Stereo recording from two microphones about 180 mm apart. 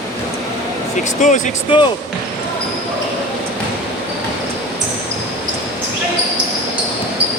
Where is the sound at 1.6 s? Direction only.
25° left (ahead or behind).